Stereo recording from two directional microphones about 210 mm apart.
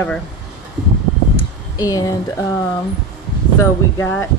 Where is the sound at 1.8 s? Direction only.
15° left (ahead or behind).